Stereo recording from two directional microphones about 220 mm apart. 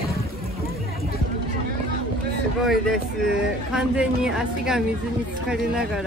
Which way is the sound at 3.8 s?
5° right (ahead or behind).